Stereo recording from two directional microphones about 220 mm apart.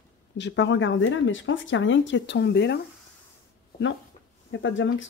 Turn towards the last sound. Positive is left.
turn(degrees=60)  # may be behind; listen again after turning